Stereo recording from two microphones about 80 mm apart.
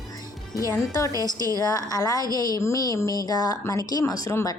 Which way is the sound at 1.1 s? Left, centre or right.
Right.